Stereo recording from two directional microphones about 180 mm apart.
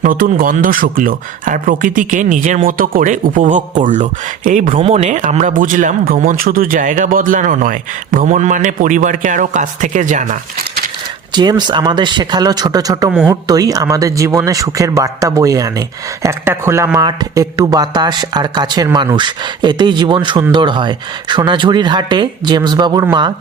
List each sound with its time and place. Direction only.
0.0 s speech: 50° right (ahead or behind)
11.3 s speech: 25° right (ahead or behind)
13.1 s speech: 5° right (ahead or behind)
13.5 s speech: 20° right (ahead or behind)